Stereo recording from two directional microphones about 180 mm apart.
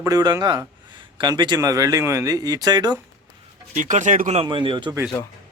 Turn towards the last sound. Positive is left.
turn(degrees=-25)  # may be behind; listen again after turning